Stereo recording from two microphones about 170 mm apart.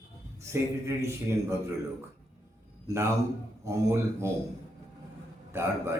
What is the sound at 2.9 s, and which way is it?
A man's voice, 15° right (ahead or behind).